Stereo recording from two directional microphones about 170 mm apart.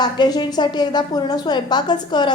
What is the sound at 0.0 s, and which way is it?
A woman's voice, 25° left (ahead or behind).